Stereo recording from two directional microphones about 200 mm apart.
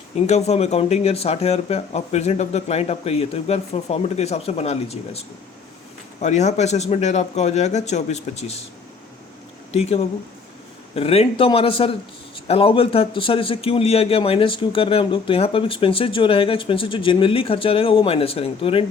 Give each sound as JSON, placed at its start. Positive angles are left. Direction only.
{"t": 0.3, "sound": "speech", "side_deg": 35}
{"t": 9.7, "sound": "a man's voice", "side_deg": 30}